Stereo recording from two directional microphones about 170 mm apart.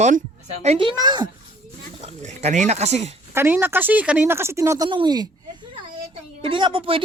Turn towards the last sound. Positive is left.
turn(degrees=-30)  # may be behind; listen again after turning